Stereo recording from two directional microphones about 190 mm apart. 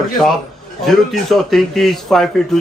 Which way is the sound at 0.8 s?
Centre (ahead or behind).